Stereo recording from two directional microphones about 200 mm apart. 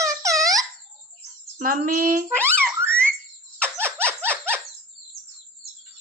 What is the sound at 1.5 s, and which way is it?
Speech, 45° right (ahead or behind).